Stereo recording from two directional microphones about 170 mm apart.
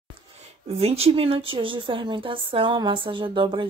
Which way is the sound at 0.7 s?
35° right (ahead or behind).